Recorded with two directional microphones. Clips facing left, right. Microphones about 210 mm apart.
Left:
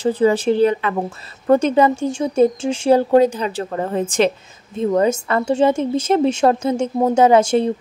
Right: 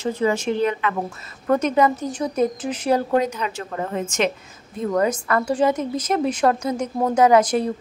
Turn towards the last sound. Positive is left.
turn(degrees=25)  # may be behind; listen again after turning